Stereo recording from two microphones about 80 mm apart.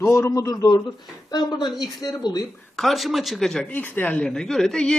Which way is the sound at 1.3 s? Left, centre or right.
Left.